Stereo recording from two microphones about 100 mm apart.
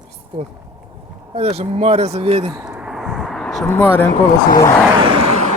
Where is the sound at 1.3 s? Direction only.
85° right.